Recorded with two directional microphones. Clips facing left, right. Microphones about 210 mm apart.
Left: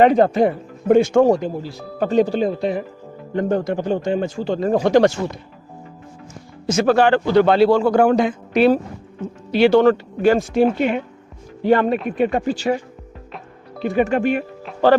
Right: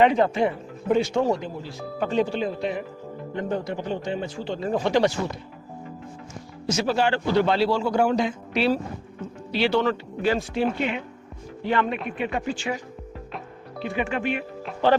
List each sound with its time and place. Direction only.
0.0 s speech: 40° left (ahead or behind)
6.7 s a man's voice: 50° left (ahead or behind)
13.8 s speech: 45° left (ahead or behind)